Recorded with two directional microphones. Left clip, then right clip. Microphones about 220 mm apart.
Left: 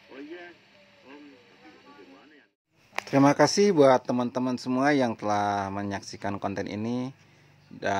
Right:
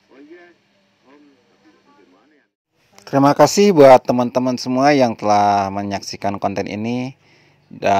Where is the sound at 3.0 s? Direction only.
20° right (ahead or behind).